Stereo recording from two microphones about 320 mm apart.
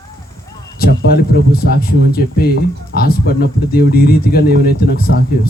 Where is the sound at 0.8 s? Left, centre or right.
Left.